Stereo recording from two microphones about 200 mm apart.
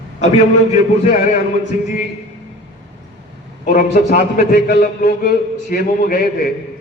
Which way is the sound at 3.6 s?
40° left (ahead or behind).